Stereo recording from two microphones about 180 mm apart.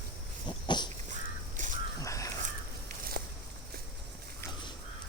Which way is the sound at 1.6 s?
45° right (ahead or behind).